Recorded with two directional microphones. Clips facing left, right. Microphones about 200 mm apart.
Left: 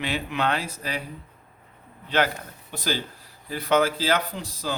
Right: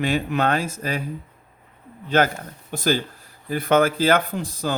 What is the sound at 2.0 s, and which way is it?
Speech, 45° right (ahead or behind).